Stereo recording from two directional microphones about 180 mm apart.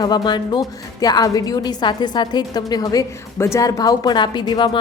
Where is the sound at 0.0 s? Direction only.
25° left (ahead or behind).